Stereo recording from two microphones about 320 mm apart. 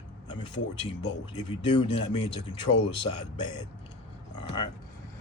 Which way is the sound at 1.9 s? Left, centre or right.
Left.